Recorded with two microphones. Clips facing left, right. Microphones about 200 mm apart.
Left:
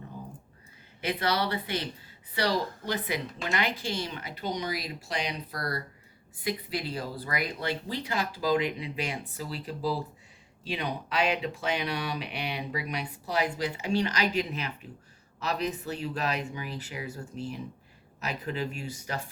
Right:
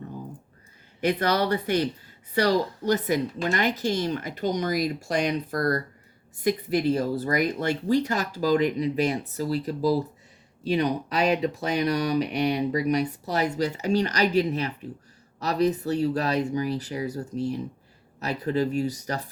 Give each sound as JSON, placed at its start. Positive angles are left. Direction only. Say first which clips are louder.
{"t": 1.0, "sound": "speech", "louder": "right 6 dB", "side_deg": -45}